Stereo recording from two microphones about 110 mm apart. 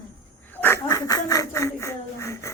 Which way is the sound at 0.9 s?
35° left (ahead or behind).